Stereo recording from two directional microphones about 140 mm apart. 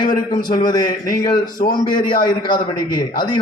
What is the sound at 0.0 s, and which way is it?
A man's voice, 30° left (ahead or behind).